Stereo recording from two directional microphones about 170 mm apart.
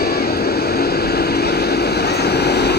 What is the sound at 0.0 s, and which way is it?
Vehicle, 65° left (ahead or behind).